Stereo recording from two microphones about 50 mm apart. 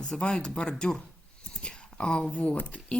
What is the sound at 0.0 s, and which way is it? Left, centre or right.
A woman's voice, centre.